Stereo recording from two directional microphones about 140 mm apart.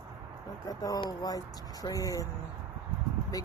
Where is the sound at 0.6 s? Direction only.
25° left (ahead or behind).